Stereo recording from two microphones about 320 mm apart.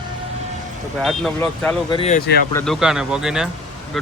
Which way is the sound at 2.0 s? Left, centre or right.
Left.